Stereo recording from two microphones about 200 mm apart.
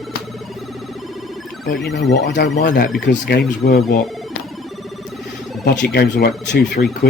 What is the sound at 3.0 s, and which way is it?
Speech, 60° left (ahead or behind).